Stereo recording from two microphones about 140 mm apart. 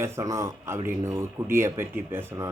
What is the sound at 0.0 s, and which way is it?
Speech, 20° right (ahead or behind).